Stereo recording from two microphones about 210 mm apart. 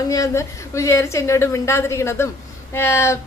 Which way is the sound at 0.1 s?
15° left (ahead or behind).